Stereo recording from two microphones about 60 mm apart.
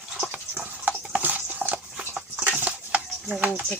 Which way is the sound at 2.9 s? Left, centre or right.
Right.